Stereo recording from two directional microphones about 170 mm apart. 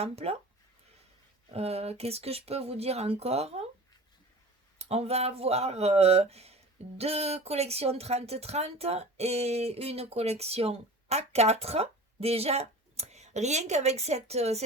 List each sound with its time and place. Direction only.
0.0 s speech: 35° right (ahead or behind)
1.5 s speech: 35° right (ahead or behind)
4.8 s speech: 35° right (ahead or behind)